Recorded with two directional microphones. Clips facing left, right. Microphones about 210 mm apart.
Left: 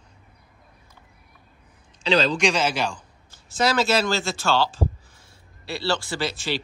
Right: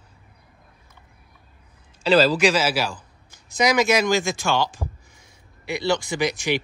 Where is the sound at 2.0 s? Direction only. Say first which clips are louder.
Right 4 dB; 5° right (ahead or behind).